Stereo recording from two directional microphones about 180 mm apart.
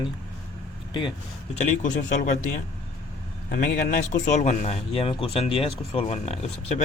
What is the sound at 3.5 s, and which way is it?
Speech, 45° left (ahead or behind).